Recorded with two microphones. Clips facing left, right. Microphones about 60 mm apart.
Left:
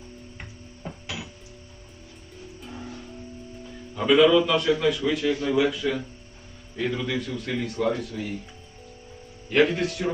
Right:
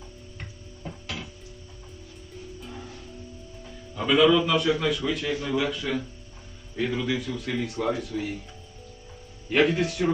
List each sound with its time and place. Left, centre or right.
3.9 s a man's voice: centre
9.5 s a man's voice: centre